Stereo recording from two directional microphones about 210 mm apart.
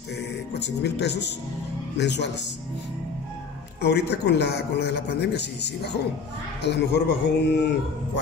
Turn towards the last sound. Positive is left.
turn(degrees=55)  # may be behind; listen again after turning